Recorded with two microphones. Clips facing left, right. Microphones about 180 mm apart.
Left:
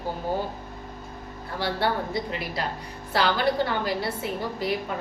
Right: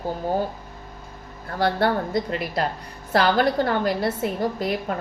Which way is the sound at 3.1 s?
50° right (ahead or behind).